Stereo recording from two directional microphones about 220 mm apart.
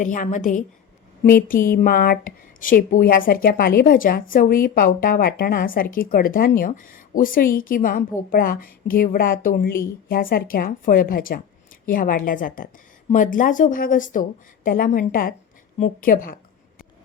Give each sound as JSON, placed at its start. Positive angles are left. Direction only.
{"t": 0.0, "sound": "a woman's voice", "side_deg": 35}